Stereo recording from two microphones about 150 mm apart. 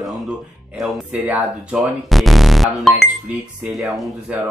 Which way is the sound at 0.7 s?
Centre (ahead or behind).